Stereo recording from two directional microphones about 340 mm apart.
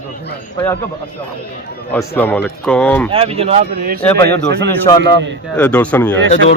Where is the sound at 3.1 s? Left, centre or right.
Centre.